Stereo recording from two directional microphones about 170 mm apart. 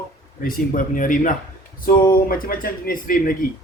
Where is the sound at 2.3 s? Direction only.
55° left (ahead or behind).